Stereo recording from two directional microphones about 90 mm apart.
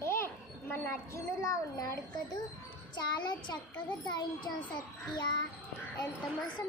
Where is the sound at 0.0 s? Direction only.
30° left (ahead or behind).